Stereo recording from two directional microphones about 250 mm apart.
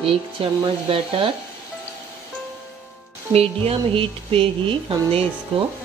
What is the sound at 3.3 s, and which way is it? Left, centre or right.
Speech, right.